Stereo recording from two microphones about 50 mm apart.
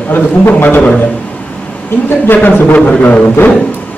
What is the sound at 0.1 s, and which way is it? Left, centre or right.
Speech, left.